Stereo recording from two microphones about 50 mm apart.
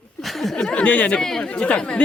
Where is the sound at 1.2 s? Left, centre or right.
Centre.